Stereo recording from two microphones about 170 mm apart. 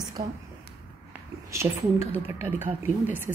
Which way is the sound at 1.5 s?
15° right (ahead or behind).